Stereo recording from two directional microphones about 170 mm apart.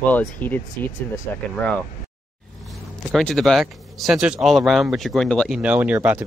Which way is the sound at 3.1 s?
Centre (ahead or behind).